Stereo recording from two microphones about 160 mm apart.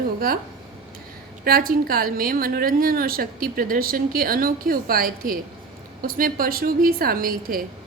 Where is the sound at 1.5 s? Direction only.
65° right (ahead or behind).